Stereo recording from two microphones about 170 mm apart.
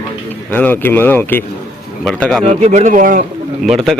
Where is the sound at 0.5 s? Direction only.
10° left (ahead or behind).